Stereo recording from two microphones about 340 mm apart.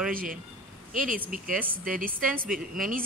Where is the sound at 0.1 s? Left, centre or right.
Right.